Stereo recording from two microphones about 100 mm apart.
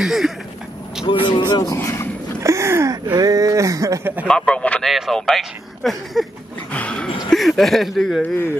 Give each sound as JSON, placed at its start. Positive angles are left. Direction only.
{"t": 0.0, "sound": "a sound", "side_deg": -5}
{"t": 1.2, "sound": "speech", "side_deg": 50}
{"t": 1.7, "sound": "speech", "side_deg": 30}
{"t": 2.4, "sound": "a sound", "side_deg": -30}
{"t": 4.3, "sound": "speech", "side_deg": 10}
{"t": 4.8, "sound": "speech", "side_deg": 0}
{"t": 6.7, "sound": "music", "side_deg": 10}
{"t": 7.2, "sound": "speech", "side_deg": 0}